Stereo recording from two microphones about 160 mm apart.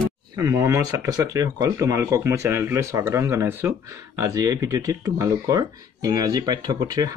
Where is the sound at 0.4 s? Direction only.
20° right (ahead or behind).